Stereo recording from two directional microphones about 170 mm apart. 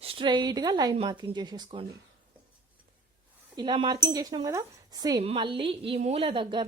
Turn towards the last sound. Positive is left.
turn(degrees=-30)  # may be behind; listen again after turning